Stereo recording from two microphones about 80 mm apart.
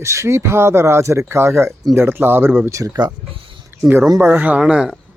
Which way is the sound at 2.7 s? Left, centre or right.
Right.